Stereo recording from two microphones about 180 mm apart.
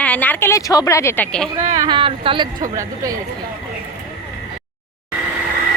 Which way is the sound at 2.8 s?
20° right (ahead or behind).